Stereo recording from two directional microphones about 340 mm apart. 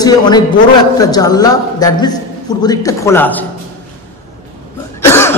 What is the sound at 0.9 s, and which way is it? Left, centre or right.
A man's voice, centre.